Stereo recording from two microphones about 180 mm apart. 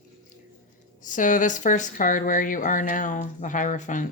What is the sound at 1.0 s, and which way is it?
Speech, 45° left (ahead or behind).